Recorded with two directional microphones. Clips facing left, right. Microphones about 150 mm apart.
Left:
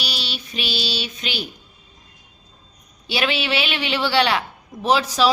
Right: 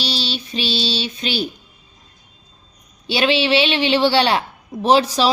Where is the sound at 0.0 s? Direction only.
30° right (ahead or behind).